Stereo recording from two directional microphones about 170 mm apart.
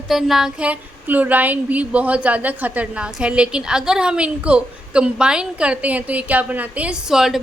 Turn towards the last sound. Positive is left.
turn(degrees=0)  # may be behind; listen again after turning